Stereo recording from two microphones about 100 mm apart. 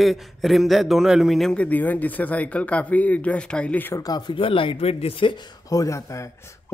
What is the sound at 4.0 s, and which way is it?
Speech, 40° left (ahead or behind).